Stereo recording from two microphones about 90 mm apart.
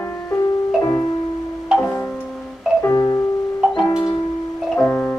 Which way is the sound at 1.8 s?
20° left (ahead or behind).